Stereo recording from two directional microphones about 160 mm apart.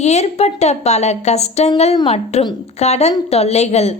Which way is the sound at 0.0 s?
45° left (ahead or behind).